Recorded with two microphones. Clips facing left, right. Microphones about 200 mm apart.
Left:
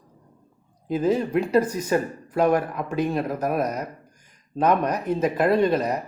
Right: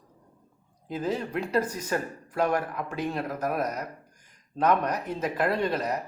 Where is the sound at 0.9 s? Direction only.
15° left (ahead or behind).